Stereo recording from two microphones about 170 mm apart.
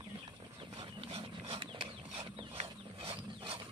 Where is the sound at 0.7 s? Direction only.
30° right (ahead or behind).